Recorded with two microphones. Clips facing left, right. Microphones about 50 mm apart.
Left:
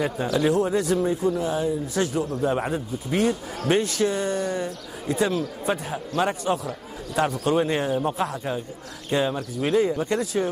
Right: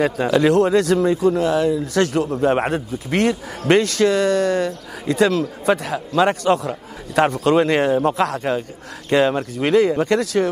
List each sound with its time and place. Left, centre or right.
0.0 s a man's voice: right